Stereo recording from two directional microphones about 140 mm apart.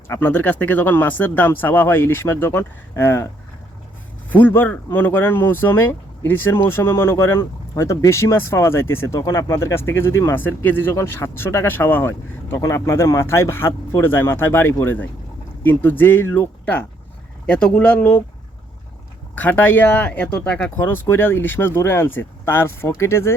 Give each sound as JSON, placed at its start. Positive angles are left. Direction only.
{"t": 0.1, "sound": "speech", "side_deg": 15}
{"t": 4.3, "sound": "speech", "side_deg": 15}
{"t": 19.4, "sound": "speech", "side_deg": 15}